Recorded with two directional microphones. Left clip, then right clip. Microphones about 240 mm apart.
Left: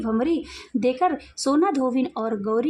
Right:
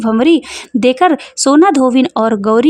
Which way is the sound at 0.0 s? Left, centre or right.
Right.